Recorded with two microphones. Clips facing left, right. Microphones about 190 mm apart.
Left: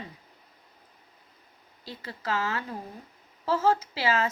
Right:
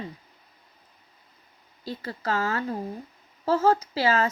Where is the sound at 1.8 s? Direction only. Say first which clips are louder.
Right 4 dB; 40° right (ahead or behind).